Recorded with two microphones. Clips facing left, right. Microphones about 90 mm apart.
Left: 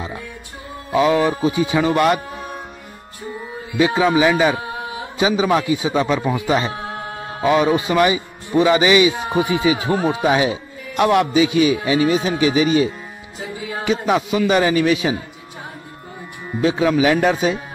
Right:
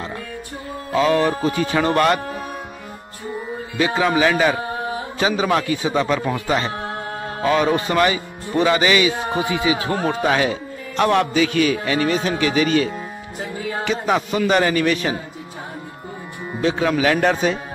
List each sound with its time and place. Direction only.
0.9 s a man's voice: 15° left (ahead or behind)
3.9 s a man's voice: 10° left (ahead or behind)
16.6 s a man's voice: 10° left (ahead or behind)